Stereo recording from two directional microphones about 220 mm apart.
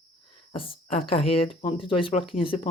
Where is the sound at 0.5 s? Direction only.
25° left (ahead or behind).